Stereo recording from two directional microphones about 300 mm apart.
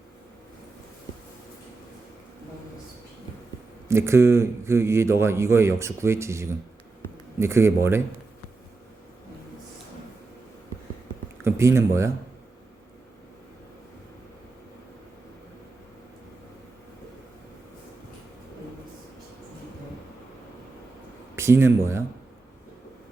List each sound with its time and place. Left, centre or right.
3.8 s a man's voice: centre
11.4 s speech: centre
21.3 s speech: centre